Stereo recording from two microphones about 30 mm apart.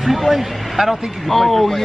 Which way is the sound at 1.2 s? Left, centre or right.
Centre.